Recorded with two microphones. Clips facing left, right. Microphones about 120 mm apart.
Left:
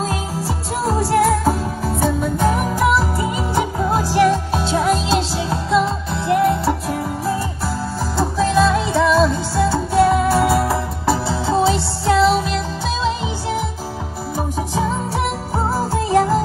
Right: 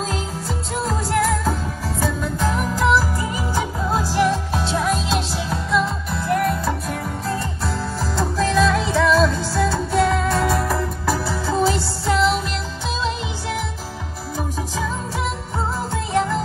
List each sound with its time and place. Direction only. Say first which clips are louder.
0.8 s music: left 5 dB; 30° left (ahead or behind)
4.5 s music: left 4 dB; 30° left (ahead or behind)
8.2 s music: left 3 dB; 5° left (ahead or behind)
10.4 s music: left 3 dB; 25° left (ahead or behind)
15.5 s music: left 6 dB; 35° left (ahead or behind)